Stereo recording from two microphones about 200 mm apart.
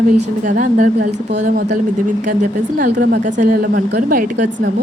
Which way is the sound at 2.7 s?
50° right (ahead or behind).